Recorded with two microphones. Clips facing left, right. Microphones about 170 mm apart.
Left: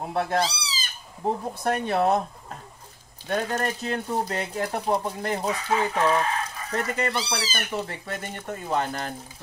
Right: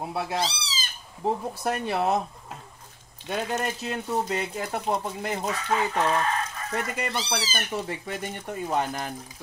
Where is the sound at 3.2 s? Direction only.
10° right (ahead or behind).